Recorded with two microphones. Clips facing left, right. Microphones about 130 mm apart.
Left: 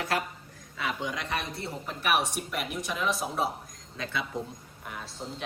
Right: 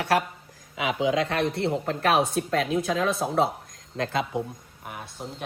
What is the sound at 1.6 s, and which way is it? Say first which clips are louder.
Speech: right 8 dB; 75° right (ahead or behind).